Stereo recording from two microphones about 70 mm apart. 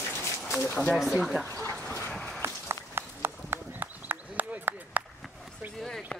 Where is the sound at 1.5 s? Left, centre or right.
Left.